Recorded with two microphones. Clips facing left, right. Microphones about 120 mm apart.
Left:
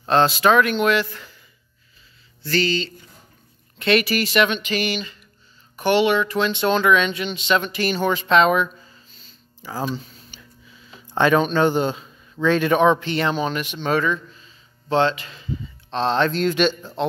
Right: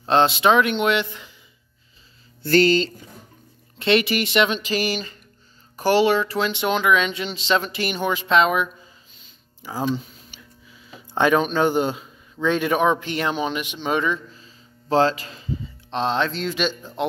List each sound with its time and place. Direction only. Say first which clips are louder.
0.0 s speech: even; 25° right (ahead or behind)
2.4 s speech: right 5 dB; 50° right (ahead or behind)
3.7 s speech: even; 25° right (ahead or behind)
7.2 s speech: left 1 dB; 30° right (ahead or behind); by 8.6 s 5° right (ahead or behind)
9.6 s a sound: right 2 dB; 15° right (ahead or behind)
11.1 s speech: left 1 dB; 10° right (ahead or behind); by 15.5 s 35° right (ahead or behind)
16.1 s speech: left 5 dB; centre (ahead or behind)